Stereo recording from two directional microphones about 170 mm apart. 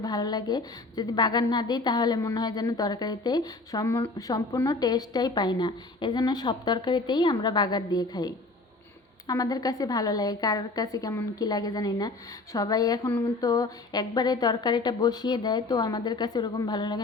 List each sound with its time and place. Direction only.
0.0 s a woman's voice: 25° left (ahead or behind)